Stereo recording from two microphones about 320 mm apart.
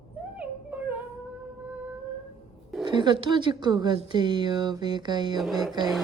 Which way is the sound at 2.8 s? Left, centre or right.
Centre.